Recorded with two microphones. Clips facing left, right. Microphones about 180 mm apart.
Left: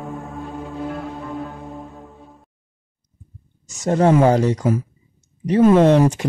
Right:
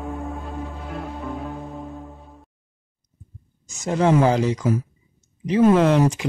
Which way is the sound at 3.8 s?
45° left (ahead or behind).